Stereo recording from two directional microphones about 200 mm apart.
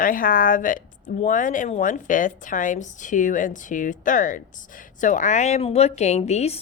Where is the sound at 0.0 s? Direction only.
45° left (ahead or behind).